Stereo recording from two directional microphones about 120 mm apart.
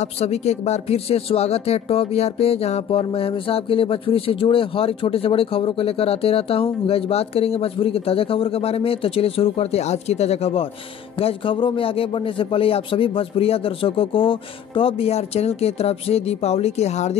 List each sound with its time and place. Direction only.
0.0 s speech: 65° left (ahead or behind)